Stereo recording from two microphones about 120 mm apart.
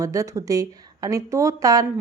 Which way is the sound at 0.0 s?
25° right (ahead or behind).